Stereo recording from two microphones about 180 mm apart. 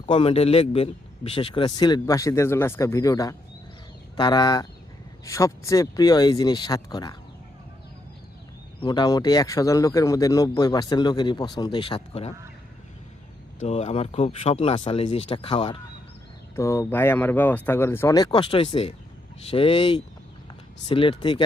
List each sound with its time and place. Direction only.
0.0 s a man's voice: 30° left (ahead or behind)
8.8 s a man's voice: 25° left (ahead or behind)
13.6 s speech: 40° left (ahead or behind)
16.6 s a man's voice: 15° left (ahead or behind)